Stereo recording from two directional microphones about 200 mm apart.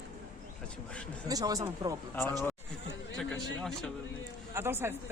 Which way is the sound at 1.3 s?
20° right (ahead or behind).